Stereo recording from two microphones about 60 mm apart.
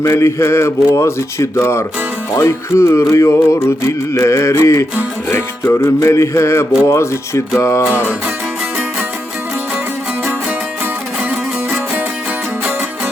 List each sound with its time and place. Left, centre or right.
0.0 s music: left
2.3 s music: left